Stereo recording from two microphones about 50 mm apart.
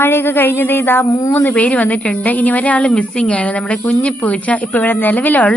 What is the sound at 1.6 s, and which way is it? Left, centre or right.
Speech, left.